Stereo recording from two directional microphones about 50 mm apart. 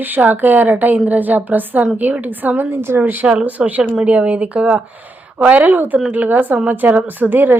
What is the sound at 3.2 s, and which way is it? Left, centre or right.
Speech, right.